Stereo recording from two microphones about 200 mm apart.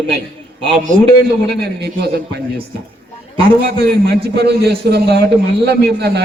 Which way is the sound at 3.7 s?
55° right (ahead or behind).